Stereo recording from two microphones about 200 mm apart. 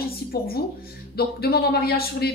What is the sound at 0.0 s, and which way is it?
A woman's voice, 50° left (ahead or behind).